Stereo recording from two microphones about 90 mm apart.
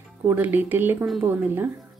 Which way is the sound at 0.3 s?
20° right (ahead or behind).